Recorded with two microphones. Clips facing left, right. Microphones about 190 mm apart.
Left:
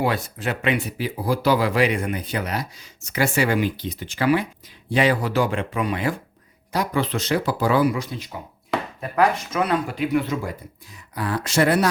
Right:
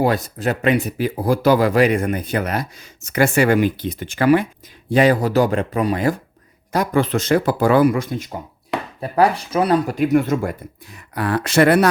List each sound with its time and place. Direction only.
0.0 s speech: 40° right (ahead or behind)
9.0 s speech: 35° right (ahead or behind); by 11.9 s 65° right (ahead or behind)